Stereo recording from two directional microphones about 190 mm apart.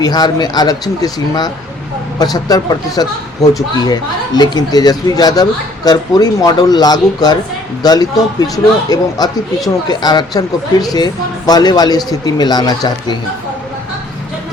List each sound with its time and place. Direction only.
0.0 s a woman's voice: 20° left (ahead or behind)